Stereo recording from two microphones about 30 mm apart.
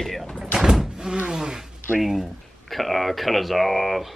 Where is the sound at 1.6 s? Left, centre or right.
Centre.